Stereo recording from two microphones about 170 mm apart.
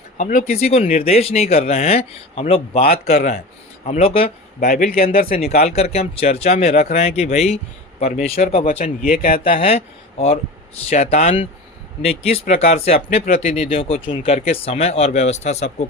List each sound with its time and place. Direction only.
0.2 s speech: 50° left (ahead or behind); by 4.3 s 35° left (ahead or behind)
4.6 s speech: 60° left (ahead or behind)
5.1 s speech: 40° left (ahead or behind)
8.7 s speech: 50° left (ahead or behind)
9.4 s speech: 35° left (ahead or behind)